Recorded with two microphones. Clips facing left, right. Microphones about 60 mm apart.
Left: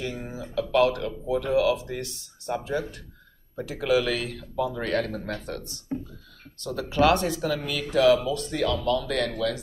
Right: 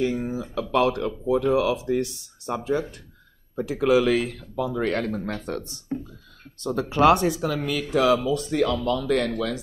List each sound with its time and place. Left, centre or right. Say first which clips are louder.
0.0 s speech: right 8 dB; right
6.6 s speech: right 3 dB; right